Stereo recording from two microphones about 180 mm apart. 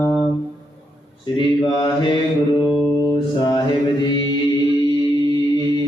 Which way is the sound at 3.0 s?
25° left (ahead or behind).